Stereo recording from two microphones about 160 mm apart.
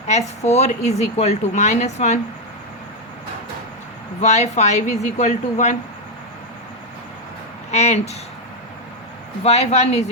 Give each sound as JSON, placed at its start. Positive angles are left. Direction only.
{"t": 0.1, "sound": "speech", "side_deg": 45}
{"t": 4.2, "sound": "speech", "side_deg": 45}
{"t": 7.7, "sound": "speech", "side_deg": 40}
{"t": 9.4, "sound": "speech", "side_deg": 40}